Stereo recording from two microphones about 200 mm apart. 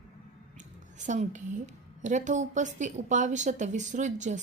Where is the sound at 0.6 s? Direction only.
40° right (ahead or behind).